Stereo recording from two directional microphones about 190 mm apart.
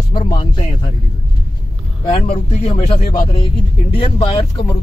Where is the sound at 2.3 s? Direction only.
35° left (ahead or behind).